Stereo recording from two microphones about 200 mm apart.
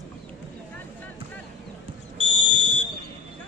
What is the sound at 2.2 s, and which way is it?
Fire alarm, 30° left (ahead or behind).